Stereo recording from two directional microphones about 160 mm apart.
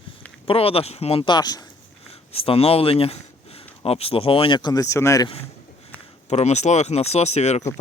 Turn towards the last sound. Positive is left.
turn(degrees=45)  # may be behind; listen again after turning